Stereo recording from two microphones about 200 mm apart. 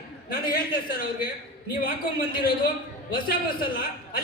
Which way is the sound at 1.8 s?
45° left (ahead or behind).